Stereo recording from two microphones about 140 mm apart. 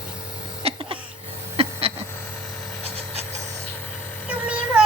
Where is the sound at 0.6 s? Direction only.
40° right (ahead or behind).